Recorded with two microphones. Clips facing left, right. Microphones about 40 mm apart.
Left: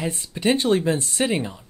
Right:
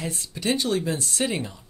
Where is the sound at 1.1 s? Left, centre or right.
Centre.